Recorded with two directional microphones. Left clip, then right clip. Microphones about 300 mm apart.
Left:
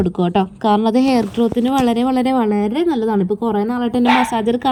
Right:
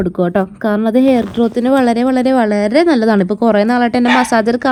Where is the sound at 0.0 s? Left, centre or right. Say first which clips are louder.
Right 2 dB; centre.